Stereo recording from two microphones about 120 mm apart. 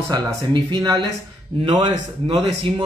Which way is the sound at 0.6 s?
40° right (ahead or behind).